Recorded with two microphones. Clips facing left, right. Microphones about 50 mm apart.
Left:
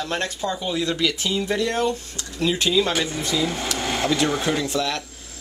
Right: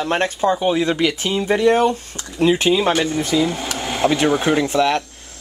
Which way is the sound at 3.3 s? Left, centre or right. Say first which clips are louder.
Right 4 dB; centre.